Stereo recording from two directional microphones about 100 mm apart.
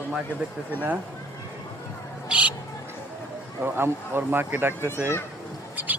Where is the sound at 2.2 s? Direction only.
10° right (ahead or behind).